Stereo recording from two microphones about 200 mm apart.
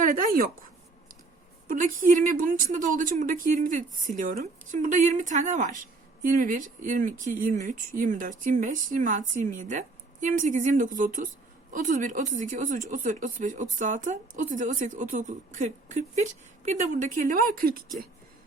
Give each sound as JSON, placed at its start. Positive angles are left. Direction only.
{"t": 0.0, "sound": "a woman's voice", "side_deg": -40}
{"t": 1.6, "sound": "a woman's voice", "side_deg": -40}